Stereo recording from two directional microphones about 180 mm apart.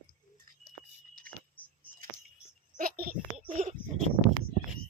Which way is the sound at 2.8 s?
50° right (ahead or behind).